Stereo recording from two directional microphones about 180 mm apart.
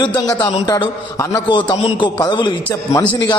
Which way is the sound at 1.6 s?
30° left (ahead or behind).